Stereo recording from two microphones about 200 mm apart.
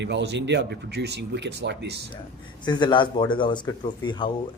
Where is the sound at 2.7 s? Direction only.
20° left (ahead or behind).